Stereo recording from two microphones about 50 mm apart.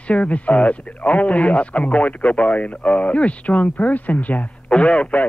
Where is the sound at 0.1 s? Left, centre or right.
Left.